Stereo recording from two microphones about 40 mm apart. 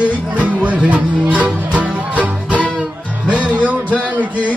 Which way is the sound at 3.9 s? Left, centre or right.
Left.